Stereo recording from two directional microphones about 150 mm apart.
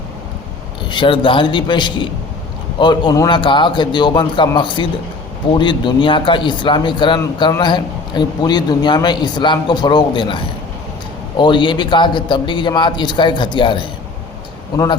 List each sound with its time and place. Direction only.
0.9 s a man's voice: 35° left (ahead or behind)